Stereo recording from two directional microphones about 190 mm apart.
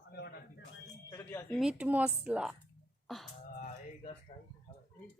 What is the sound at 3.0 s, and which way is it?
Beatboxing, centre (ahead or behind).